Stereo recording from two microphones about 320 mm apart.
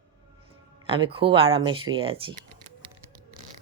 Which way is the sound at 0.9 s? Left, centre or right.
Centre.